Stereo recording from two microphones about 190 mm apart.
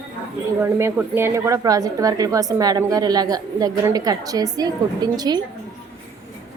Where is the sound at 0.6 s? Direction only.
10° right (ahead or behind).